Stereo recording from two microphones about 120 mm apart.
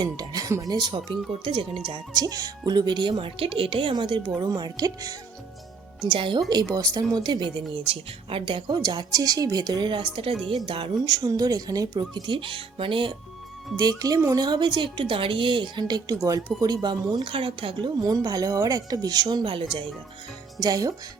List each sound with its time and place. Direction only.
0.0 s speech: 35° right (ahead or behind)
6.0 s speech: 45° right (ahead or behind)
6.5 s speech: 35° right (ahead or behind)
13.7 s speech: 35° right (ahead or behind)
18.0 s speech: 30° right (ahead or behind)
20.6 s speech: 30° right (ahead or behind)